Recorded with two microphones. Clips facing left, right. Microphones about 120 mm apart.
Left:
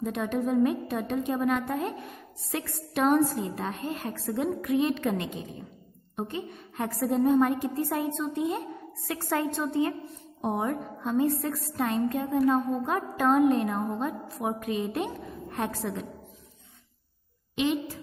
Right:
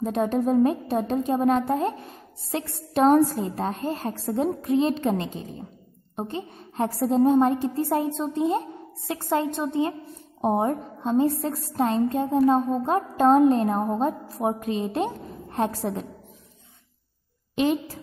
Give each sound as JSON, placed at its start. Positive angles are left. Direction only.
{"t": 0.0, "sound": "a woman's voice", "side_deg": -35}
{"t": 10.4, "sound": "a woman's voice", "side_deg": -35}